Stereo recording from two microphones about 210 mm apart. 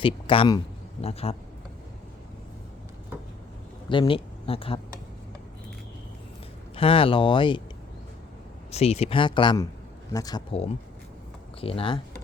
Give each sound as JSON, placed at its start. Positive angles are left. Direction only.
{"t": 0.0, "sound": "speech", "side_deg": 25}
{"t": 3.8, "sound": "speech", "side_deg": 25}
{"t": 6.7, "sound": "speech", "side_deg": 25}
{"t": 8.7, "sound": "speech", "side_deg": 30}
{"t": 11.6, "sound": "speech", "side_deg": 25}